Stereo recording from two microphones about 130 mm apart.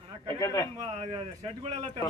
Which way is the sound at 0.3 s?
25° left (ahead or behind).